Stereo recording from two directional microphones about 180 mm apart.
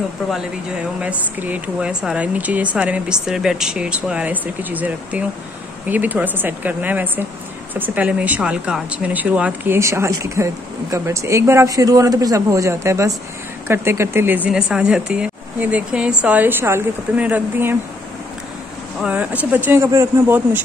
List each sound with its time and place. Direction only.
1.0 s speech: 10° right (ahead or behind)
19.0 s speech: 5° right (ahead or behind)